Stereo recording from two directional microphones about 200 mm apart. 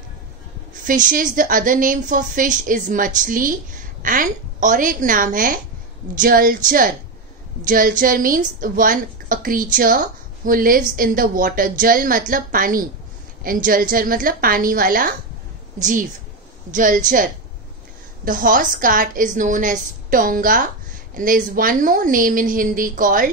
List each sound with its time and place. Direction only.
0.8 s a woman's voice: 45° right (ahead or behind)